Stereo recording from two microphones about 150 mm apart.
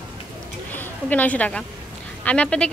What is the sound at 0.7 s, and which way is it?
A woman's voice, 10° left (ahead or behind).